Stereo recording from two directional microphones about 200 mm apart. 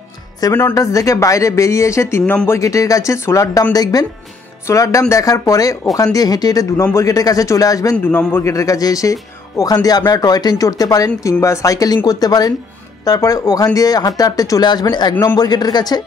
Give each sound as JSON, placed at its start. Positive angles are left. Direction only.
{"t": 0.4, "sound": "speech", "side_deg": 15}
{"t": 7.9, "sound": "speech", "side_deg": 5}